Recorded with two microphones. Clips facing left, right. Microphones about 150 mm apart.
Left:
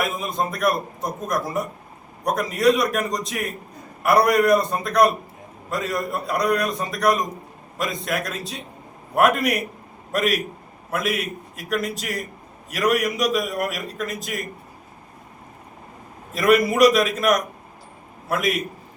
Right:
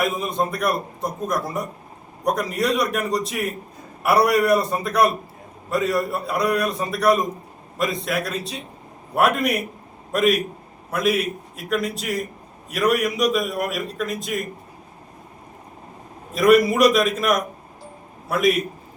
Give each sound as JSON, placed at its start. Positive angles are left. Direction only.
{"t": 0.0, "sound": "a man's voice", "side_deg": 0}
{"t": 16.3, "sound": "a man's voice", "side_deg": 0}